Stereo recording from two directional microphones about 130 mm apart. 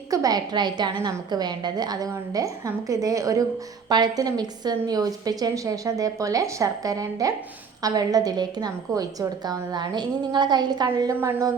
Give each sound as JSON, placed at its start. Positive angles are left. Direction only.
{"t": 0.1, "sound": "a woman's voice", "side_deg": -30}